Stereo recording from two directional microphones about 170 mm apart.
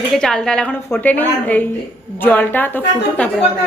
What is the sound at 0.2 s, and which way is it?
A woman's voice, 5° left (ahead or behind).